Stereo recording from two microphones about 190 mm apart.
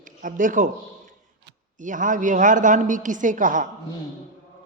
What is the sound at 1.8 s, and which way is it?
A woman's voice, 45° right (ahead or behind).